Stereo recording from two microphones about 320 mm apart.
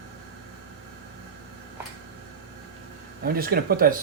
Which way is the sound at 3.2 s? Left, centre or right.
Right.